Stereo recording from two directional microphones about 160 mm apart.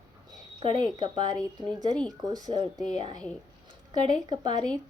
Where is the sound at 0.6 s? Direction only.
30° right (ahead or behind).